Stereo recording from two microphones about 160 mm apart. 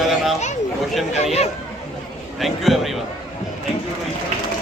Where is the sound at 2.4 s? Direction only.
Centre (ahead or behind).